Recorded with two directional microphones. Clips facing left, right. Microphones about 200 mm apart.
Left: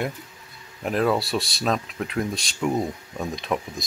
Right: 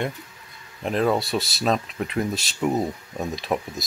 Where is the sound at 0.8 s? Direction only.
Centre (ahead or behind).